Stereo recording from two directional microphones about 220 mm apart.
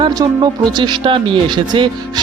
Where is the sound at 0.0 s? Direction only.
20° right (ahead or behind).